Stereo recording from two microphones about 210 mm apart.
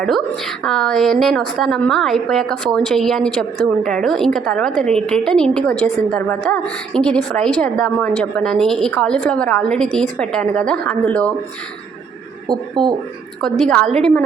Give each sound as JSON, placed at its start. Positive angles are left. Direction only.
{"t": 0.0, "sound": "a woman's voice", "side_deg": 0}
{"t": 12.5, "sound": "speech", "side_deg": -20}
{"t": 13.4, "sound": "a woman's voice", "side_deg": 5}